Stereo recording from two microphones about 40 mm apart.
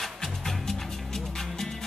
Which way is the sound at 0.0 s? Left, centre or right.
Centre.